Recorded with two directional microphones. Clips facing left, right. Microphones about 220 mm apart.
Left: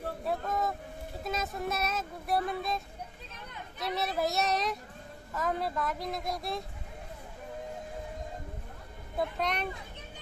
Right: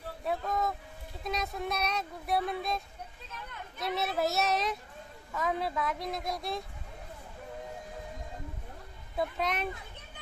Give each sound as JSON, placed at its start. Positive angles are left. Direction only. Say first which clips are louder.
{"t": 0.2, "sound": "a sound", "louder": "right 1 dB", "side_deg": 0}
{"t": 1.2, "sound": "speech", "louder": "even", "side_deg": 0}
{"t": 3.8, "sound": "speech", "louder": "even", "side_deg": 0}
{"t": 9.1, "sound": "speech", "louder": "even", "side_deg": 0}